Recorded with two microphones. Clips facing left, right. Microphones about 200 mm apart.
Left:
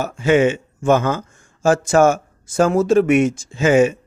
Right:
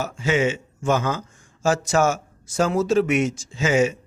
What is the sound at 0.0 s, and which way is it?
Speech, 55° left (ahead or behind).